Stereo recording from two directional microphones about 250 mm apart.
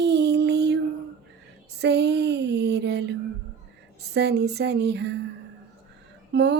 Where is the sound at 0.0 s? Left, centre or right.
Right.